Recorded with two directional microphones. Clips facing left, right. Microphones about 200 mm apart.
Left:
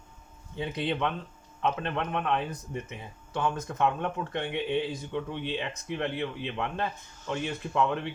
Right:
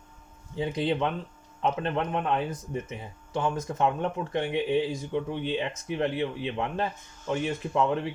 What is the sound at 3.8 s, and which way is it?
Speech, 25° right (ahead or behind).